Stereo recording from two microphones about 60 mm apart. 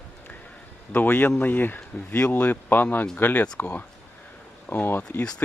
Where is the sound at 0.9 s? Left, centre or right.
Left.